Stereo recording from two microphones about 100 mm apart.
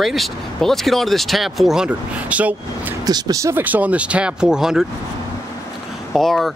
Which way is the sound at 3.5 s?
15° right (ahead or behind).